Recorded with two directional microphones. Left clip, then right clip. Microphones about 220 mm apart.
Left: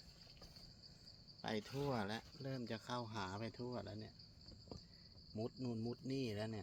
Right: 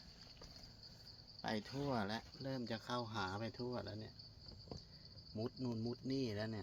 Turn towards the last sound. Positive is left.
turn(degrees=15)  # may be behind; listen again after turning